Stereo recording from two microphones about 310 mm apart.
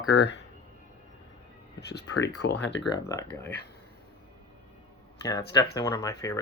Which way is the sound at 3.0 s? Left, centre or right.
Centre.